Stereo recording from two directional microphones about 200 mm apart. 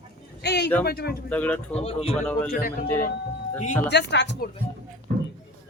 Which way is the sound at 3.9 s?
60° left (ahead or behind).